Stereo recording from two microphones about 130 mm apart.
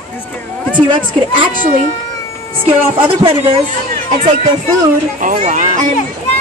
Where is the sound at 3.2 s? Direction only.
45° right (ahead or behind).